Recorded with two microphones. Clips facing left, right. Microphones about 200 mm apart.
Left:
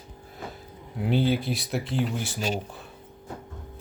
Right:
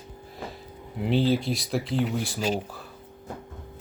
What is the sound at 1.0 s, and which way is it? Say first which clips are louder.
Speech: right 1 dB; centre (ahead or behind).